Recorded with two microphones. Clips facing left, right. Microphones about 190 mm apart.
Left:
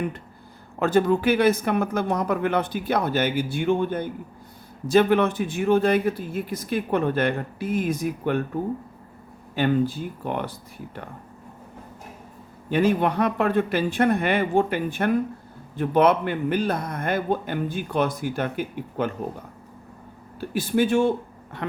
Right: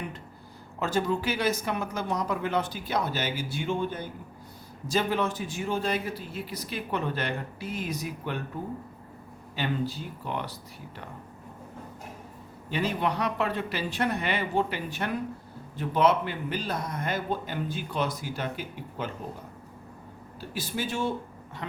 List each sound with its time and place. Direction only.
0.8 s speech: 55° left (ahead or behind)
9.6 s speech: 50° left (ahead or behind)
12.6 s speech: 50° left (ahead or behind)
20.4 s speech: 55° left (ahead or behind)